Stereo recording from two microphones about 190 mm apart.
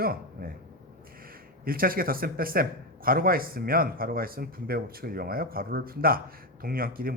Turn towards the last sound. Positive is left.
turn(degrees=-50)  # may be behind; listen again after turning